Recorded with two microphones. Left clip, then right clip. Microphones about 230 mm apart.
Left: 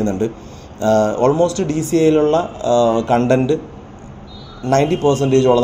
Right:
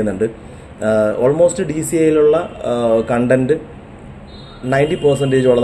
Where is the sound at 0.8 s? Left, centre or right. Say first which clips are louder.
Even; left.